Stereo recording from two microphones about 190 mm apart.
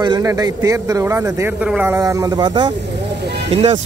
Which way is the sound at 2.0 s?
20° right (ahead or behind).